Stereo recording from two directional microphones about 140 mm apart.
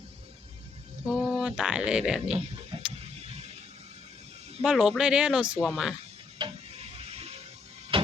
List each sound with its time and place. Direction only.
1.1 s speech: 5° right (ahead or behind)
2.7 s a sound: 45° right (ahead or behind)
3.2 s music: 45° right (ahead or behind)
4.6 s speech: 5° right (ahead or behind)
6.7 s music: 45° right (ahead or behind)
7.9 s a sound: 40° right (ahead or behind)